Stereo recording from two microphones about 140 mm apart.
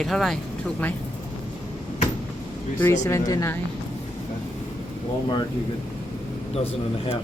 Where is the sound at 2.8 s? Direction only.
20° left (ahead or behind).